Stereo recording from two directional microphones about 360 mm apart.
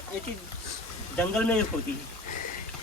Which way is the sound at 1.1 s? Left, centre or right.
Centre.